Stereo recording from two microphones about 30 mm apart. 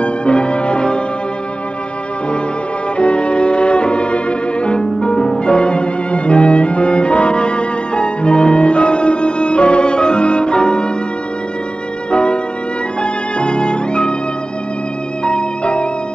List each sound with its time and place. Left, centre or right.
0.0 s music: left
3.0 s music: left
12.1 s violin: left
13.0 s music: left
15.2 s music: left